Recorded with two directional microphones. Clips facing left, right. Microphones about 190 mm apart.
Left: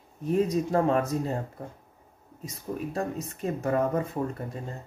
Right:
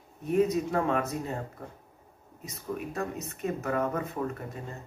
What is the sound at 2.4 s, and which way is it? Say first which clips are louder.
Speech: left 2 dB; 30° left (ahead or behind).